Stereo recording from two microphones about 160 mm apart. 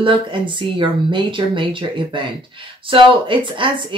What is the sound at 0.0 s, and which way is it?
Speech, 30° right (ahead or behind).